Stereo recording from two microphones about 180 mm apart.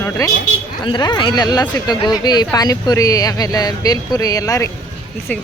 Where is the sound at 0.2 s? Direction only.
20° left (ahead or behind).